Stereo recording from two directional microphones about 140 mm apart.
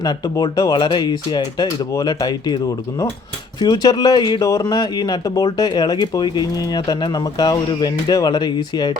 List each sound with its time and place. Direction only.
0.0 s speech: 30° left (ahead or behind)